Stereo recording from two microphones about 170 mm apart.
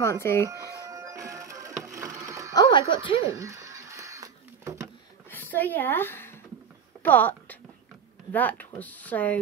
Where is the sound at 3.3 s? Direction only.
20° right (ahead or behind).